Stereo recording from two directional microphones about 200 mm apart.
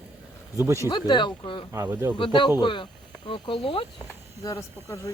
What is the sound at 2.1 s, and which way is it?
Speech, 25° left (ahead or behind).